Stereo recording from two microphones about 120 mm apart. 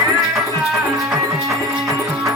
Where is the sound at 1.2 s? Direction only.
25° right (ahead or behind).